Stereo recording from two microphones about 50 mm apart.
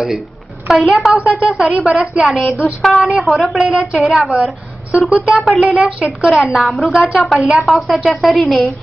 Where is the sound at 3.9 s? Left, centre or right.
Centre.